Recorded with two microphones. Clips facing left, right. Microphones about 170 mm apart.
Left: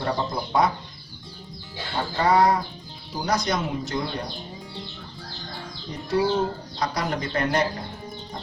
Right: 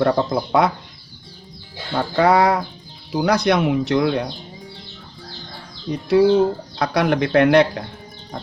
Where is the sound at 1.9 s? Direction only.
70° right (ahead or behind).